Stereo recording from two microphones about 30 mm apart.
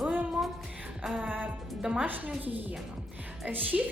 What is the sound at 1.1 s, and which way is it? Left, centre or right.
Music, right.